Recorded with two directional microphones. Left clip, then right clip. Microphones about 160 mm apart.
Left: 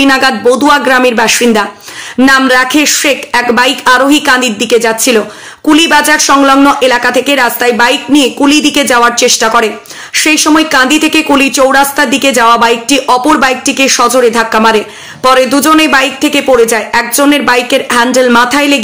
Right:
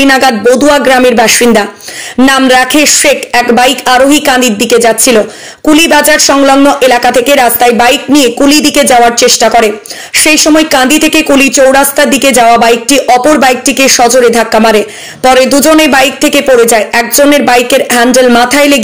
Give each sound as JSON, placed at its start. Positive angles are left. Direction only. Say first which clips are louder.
{"t": 0.0, "sound": "a woman's voice", "louder": "right 2 dB", "side_deg": -10}